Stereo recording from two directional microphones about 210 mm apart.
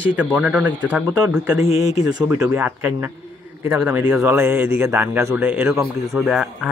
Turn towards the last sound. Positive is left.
turn(degrees=0)  # may be behind; listen again after turning